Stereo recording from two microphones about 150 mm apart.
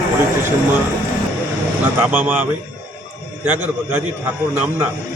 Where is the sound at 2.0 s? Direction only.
10° right (ahead or behind).